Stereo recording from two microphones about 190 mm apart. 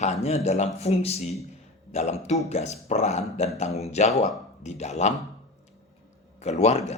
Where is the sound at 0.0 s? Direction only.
35° left (ahead or behind).